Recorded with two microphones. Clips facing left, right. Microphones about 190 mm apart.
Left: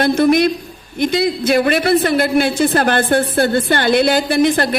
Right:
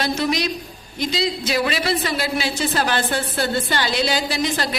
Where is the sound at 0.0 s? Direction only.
55° left (ahead or behind).